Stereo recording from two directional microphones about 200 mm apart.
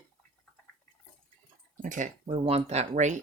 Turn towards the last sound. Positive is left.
turn(degrees=-35)  # may be behind; listen again after turning